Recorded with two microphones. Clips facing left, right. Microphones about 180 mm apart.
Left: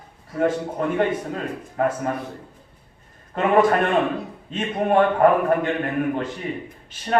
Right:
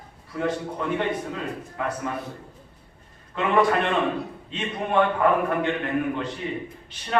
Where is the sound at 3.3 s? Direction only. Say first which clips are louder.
Left 4 dB; 45° left (ahead or behind).